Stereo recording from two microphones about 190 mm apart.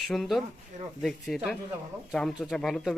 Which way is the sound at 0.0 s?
Centre (ahead or behind).